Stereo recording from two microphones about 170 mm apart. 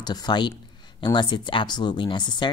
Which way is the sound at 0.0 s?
25° left (ahead or behind).